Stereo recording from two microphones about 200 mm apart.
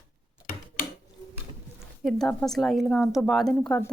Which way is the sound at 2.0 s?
Centre (ahead or behind).